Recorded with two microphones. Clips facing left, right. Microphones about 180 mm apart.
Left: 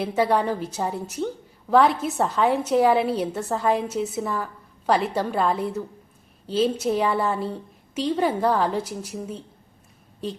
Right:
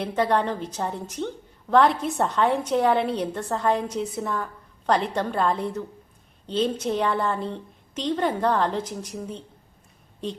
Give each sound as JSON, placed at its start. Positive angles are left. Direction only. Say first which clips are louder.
{"t": 0.0, "sound": "a woman's voice", "louder": "left 1 dB", "side_deg": 5}